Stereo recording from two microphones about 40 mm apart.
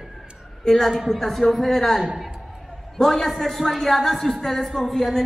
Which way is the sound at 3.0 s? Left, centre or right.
Centre.